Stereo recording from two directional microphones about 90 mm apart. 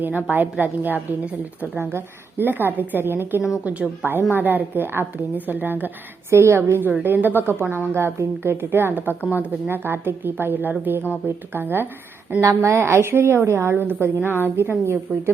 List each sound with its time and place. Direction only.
0.3 s a woman's voice: 20° right (ahead or behind)
12.4 s a woman's voice: 35° right (ahead or behind)